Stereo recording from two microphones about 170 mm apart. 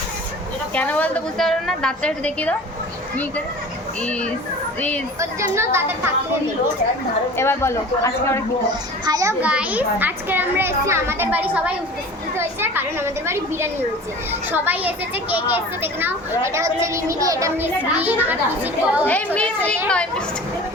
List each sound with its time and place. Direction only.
0.7 s a woman's voice: 10° left (ahead or behind)
5.2 s speech: 15° right (ahead or behind)
7.3 s a woman's voice: 15° left (ahead or behind)
9.0 s a child's voice: 20° right (ahead or behind)
9.4 s speech: 5° right (ahead or behind)
19.0 s a child's voice: 10° left (ahead or behind)